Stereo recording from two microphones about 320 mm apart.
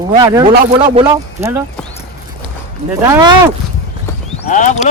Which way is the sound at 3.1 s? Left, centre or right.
Centre.